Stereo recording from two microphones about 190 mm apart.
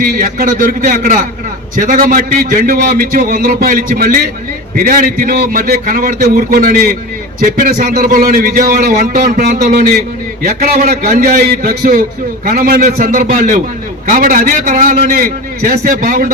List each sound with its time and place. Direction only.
0.0 s a man's voice: 45° right (ahead or behind)